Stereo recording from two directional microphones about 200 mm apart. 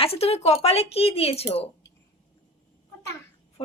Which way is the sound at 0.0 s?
30° left (ahead or behind).